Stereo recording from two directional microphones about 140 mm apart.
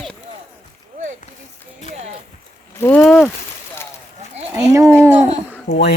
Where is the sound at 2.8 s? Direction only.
20° left (ahead or behind).